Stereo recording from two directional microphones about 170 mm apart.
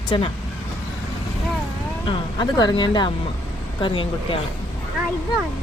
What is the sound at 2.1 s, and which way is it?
Speech, 25° left (ahead or behind).